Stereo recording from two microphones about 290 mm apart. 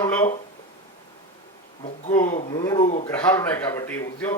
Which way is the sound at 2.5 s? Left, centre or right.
Centre.